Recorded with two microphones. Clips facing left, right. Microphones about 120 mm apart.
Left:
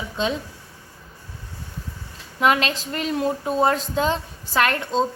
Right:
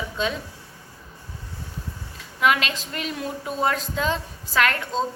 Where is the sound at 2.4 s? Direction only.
35° left (ahead or behind).